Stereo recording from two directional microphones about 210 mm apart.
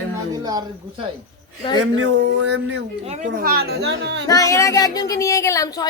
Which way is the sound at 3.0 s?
35° right (ahead or behind).